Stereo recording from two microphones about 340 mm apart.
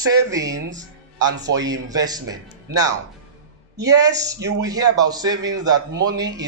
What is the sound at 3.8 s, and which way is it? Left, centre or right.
Music, centre.